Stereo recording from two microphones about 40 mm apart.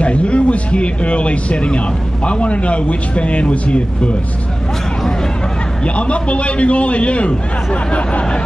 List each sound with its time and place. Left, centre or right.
0.0 s a man's voice: left
5.9 s a man's voice: left